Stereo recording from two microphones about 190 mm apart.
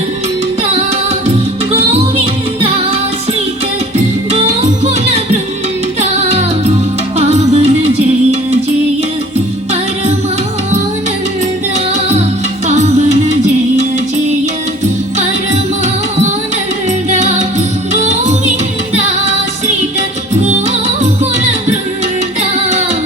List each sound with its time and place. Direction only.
4.3 s music: 35° right (ahead or behind)
12.6 s music: 35° right (ahead or behind)
17.1 s music: 35° right (ahead or behind)
20.8 s music: 35° right (ahead or behind)